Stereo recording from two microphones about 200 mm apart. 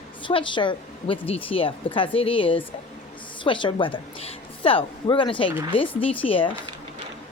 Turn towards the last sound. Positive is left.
turn(degrees=25)  # may be behind; listen again after turning